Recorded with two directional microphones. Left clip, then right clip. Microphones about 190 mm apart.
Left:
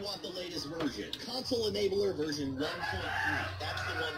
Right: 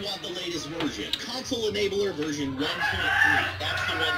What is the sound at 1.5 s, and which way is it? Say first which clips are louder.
Speech: right 5 dB; 25° left (ahead or behind).